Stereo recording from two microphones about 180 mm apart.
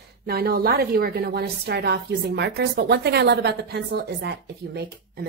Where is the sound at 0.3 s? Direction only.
60° right (ahead or behind).